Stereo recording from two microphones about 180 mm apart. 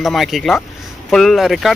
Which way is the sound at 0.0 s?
Centre (ahead or behind).